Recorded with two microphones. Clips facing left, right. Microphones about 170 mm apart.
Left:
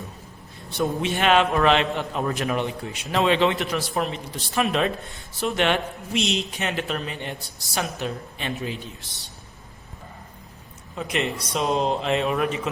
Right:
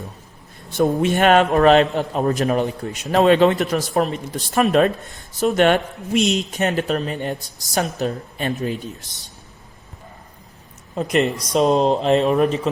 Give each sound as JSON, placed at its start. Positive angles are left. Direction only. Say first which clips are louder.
{"t": 0.7, "sound": "a man's voice", "louder": "right 7 dB", "side_deg": -45}
{"t": 10.9, "sound": "speech", "louder": "right 7 dB", "side_deg": -40}